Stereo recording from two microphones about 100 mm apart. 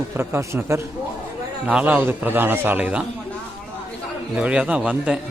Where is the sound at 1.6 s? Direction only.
15° right (ahead or behind).